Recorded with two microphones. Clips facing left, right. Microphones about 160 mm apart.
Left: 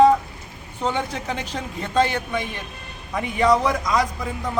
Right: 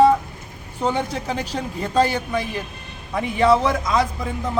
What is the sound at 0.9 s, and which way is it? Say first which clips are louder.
Speech: right 2 dB; 35° right (ahead or behind).